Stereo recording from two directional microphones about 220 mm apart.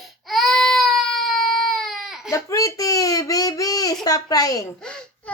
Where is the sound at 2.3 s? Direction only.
15° left (ahead or behind).